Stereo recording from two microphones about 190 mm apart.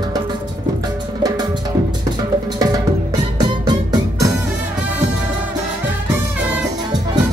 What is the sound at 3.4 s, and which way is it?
Music, 25° right (ahead or behind).